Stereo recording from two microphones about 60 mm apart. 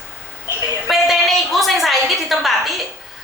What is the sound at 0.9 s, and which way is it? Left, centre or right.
A woman's voice, centre.